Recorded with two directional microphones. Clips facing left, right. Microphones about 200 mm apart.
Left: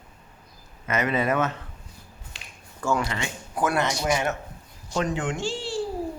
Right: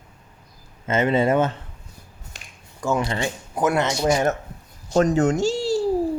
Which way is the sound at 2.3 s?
45° right (ahead or behind).